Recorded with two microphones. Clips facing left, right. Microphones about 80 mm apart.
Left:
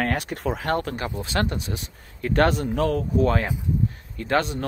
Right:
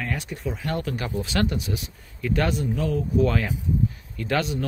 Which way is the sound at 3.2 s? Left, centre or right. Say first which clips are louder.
Left 1 dB; left.